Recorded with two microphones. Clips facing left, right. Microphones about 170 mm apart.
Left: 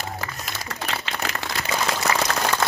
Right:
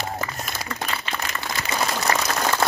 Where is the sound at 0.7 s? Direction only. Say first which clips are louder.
Left 1 dB; 85° left.